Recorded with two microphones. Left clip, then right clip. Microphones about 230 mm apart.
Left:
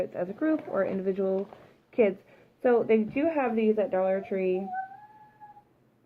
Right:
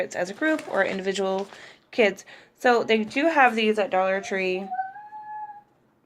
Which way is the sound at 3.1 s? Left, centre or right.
Centre.